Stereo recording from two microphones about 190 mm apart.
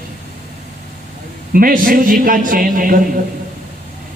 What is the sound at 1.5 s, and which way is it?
A man's voice, 50° right (ahead or behind).